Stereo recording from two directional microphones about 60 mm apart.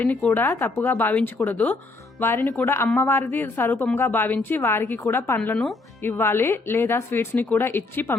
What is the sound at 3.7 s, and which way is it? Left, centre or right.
A woman's voice, left.